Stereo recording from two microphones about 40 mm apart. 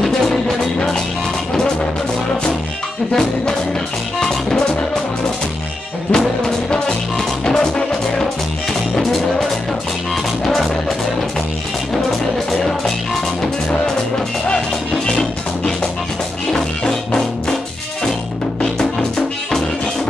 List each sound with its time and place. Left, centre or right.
4.2 s music: centre
6.1 s music: centre
12.4 s music: centre
15.0 s music: centre
18.6 s music: left